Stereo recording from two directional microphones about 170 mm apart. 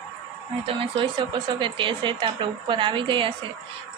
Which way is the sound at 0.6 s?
30° right (ahead or behind).